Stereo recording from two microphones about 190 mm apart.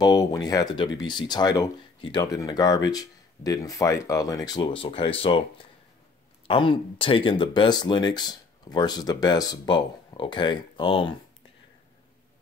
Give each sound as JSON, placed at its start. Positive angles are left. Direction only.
{"t": 0.0, "sound": "speech", "side_deg": 20}
{"t": 6.4, "sound": "speech", "side_deg": 25}